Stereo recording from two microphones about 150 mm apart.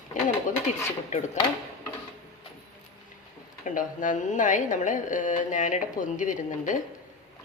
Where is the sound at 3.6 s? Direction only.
60° left (ahead or behind).